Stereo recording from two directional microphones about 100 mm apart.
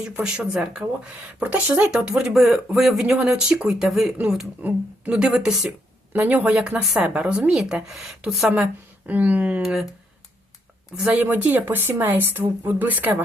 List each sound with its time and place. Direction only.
0.0 s speech: 10° right (ahead or behind)
6.1 s speech: 15° right (ahead or behind)
8.6 s speech: 15° right (ahead or behind)
10.9 s speech: 10° right (ahead or behind)